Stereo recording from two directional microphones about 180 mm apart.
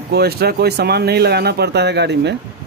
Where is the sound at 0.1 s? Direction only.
60° right (ahead or behind).